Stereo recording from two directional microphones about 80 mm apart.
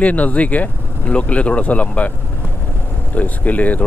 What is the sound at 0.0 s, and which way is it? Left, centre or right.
Speech, centre.